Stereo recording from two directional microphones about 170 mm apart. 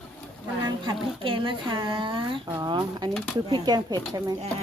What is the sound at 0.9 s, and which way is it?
Speech, 30° right (ahead or behind).